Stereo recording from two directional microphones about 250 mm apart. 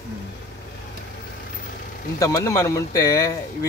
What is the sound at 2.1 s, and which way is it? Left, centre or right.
Speech, centre.